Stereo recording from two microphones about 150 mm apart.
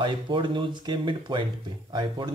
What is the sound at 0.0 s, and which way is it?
Speech, 35° right (ahead or behind).